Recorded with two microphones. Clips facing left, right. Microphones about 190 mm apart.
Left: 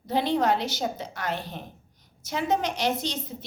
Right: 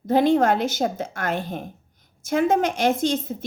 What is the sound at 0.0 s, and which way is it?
A woman's voice, 50° right (ahead or behind).